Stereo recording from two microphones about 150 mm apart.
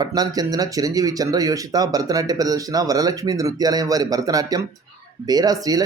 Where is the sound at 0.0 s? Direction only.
25° right (ahead or behind).